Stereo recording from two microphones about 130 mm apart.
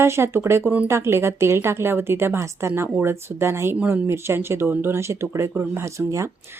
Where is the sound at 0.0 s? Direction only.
20° right (ahead or behind).